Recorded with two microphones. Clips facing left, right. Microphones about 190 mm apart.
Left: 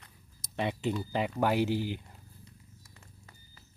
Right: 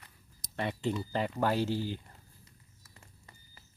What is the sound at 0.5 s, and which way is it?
Speech, 15° left (ahead or behind).